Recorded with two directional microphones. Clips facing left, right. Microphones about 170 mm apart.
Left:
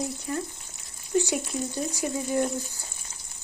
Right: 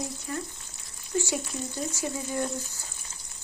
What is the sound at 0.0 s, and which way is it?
Frying, 20° left (ahead or behind).